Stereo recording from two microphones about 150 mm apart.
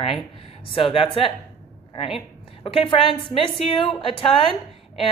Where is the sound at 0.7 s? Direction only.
35° left (ahead or behind).